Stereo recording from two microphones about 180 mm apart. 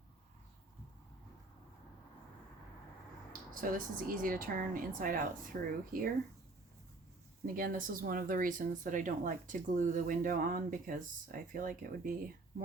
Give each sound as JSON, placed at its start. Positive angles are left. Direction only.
{"t": 3.5, "sound": "speech", "side_deg": -50}
{"t": 7.4, "sound": "speech", "side_deg": -50}